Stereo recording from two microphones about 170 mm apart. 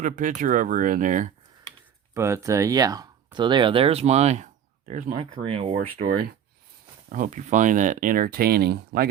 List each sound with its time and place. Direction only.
0.0 s speech: 50° right (ahead or behind)
2.1 s speech: 15° right (ahead or behind); by 5.1 s 45° right (ahead or behind)
5.1 s speech: 30° right (ahead or behind)
5.7 s speech: 55° right (ahead or behind)